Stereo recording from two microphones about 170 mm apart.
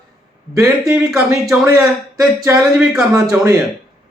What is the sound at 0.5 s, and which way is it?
A man's voice, 10° right (ahead or behind).